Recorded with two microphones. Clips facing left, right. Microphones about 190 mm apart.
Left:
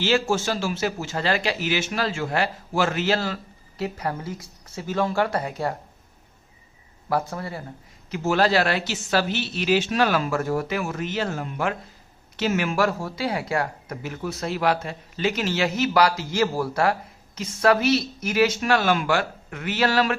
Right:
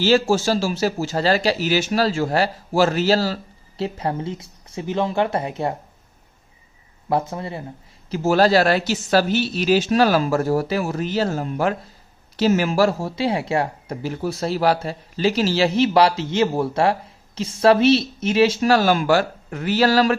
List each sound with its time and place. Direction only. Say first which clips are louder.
0.0 s speech: right 5 dB; 35° right (ahead or behind)
7.1 s speech: right 3 dB; 25° right (ahead or behind)
8.1 s speech: right 5 dB; 35° right (ahead or behind)